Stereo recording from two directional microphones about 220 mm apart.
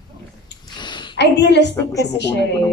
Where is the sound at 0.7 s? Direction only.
20° left (ahead or behind).